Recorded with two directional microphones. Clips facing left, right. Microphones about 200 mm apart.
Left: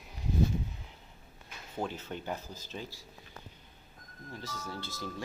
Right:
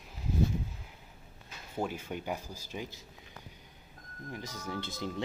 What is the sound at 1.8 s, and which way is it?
Speech, 10° right (ahead or behind).